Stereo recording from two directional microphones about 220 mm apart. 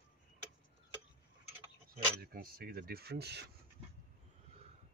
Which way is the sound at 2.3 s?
40° right (ahead or behind).